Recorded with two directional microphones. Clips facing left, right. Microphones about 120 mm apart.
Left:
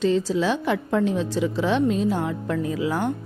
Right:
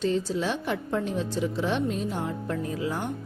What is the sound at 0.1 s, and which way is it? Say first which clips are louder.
A woman's voice: left 5 dB; 90° left.